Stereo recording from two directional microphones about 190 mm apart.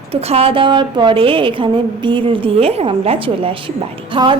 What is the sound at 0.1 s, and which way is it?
Speech, 30° right (ahead or behind).